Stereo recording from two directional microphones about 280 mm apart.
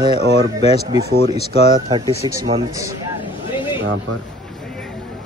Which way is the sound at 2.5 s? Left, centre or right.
Centre.